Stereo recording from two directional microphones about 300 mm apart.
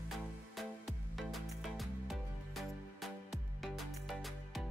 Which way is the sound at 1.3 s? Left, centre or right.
Centre.